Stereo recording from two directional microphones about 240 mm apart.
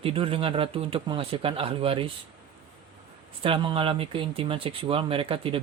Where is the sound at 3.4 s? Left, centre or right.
Right.